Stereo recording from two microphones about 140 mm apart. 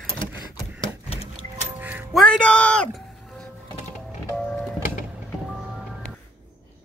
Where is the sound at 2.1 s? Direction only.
5° left (ahead or behind).